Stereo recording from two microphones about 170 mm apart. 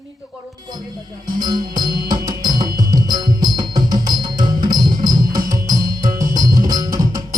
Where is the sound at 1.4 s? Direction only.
25° right (ahead or behind).